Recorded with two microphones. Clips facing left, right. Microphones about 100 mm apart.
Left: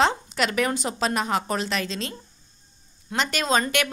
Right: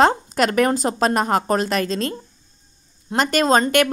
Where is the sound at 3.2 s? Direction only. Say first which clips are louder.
Right 7 dB; 45° right (ahead or behind).